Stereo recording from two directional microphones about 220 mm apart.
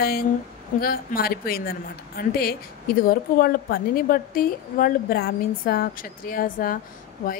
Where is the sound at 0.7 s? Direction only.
40° left (ahead or behind).